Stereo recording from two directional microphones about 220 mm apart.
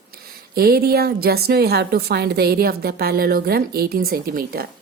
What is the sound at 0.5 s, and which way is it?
A woman's voice, 45° right (ahead or behind).